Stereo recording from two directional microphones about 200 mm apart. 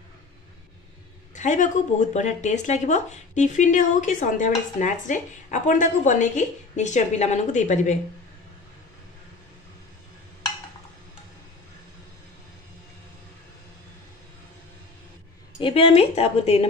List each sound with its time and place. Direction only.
1.3 s speech: 35° left (ahead or behind)
15.6 s a woman's voice: 30° left (ahead or behind)